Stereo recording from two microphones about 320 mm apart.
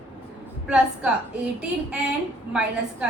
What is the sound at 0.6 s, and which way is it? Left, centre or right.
A woman's voice, centre.